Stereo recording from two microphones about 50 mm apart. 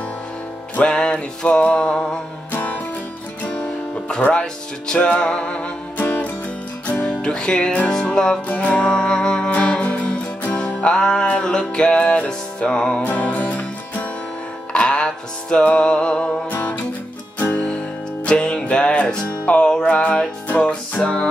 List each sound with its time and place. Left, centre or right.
0.8 s music: centre
1.9 s music: centre
2.5 s music: left
4.2 s music: left
5.9 s music: left
7.1 s music: centre
13.0 s music: left
16.4 s music: left